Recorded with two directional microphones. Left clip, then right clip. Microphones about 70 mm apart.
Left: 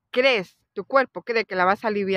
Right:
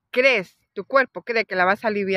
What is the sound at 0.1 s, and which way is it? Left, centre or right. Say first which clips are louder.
Speech: right 2 dB; left.